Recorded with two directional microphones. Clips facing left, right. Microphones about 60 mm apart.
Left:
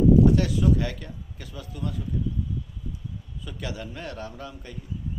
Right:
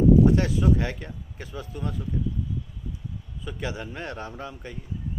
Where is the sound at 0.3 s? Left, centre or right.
Right.